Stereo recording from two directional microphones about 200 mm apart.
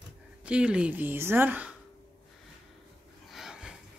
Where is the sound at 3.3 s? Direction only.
Centre (ahead or behind).